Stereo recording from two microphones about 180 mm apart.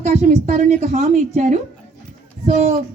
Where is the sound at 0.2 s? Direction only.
40° right (ahead or behind).